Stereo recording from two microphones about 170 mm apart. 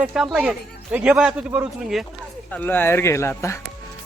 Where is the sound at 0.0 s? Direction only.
5° right (ahead or behind).